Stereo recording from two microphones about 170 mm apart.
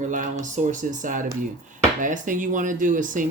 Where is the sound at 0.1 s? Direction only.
50° right (ahead or behind).